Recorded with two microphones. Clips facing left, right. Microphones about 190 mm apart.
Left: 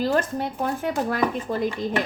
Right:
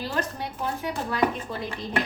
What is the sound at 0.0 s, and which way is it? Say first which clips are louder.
Speech: left 7 dB; 50° left (ahead or behind).